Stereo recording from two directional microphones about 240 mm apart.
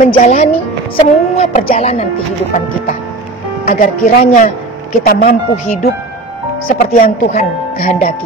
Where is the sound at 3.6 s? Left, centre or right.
Left.